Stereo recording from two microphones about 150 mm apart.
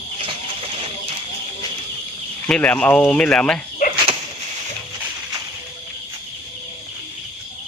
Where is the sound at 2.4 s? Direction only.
10° left (ahead or behind).